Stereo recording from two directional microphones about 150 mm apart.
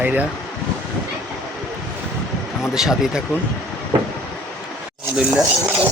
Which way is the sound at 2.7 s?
5° right (ahead or behind).